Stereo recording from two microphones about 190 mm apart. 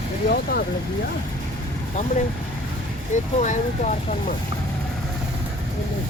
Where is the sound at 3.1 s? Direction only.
40° left (ahead or behind).